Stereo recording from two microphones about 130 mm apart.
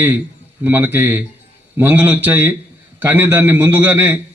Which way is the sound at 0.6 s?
15° right (ahead or behind).